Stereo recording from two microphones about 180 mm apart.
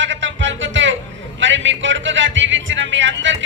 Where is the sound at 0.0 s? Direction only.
90° right.